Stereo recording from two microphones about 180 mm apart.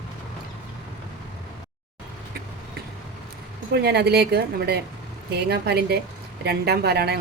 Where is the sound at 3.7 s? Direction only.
65° right (ahead or behind).